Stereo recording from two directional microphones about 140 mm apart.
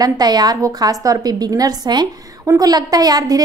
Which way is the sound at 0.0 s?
30° right (ahead or behind).